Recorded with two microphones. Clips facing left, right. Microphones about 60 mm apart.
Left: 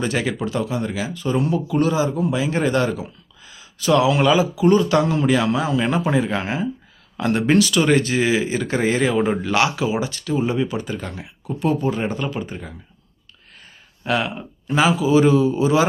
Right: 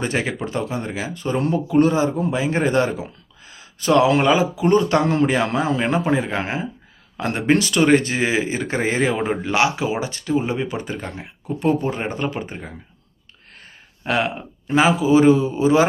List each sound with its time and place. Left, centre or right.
0.0 s speech: right
14.1 s speech: right